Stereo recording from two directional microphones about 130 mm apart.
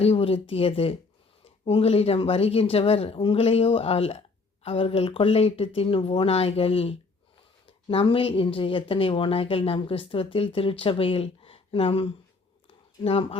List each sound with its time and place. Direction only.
0.0 s speech: 50° left (ahead or behind)